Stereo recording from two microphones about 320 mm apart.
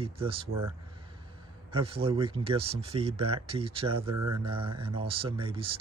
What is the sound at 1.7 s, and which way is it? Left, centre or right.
Speech, centre.